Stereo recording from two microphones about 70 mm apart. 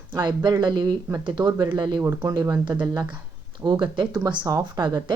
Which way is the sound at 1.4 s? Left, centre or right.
Right.